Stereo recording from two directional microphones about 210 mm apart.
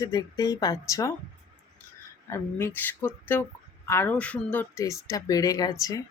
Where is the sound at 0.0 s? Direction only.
15° left (ahead or behind).